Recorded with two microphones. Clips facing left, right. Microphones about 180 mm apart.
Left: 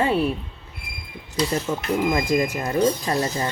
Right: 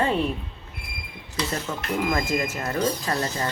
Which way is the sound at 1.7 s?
10° left (ahead or behind).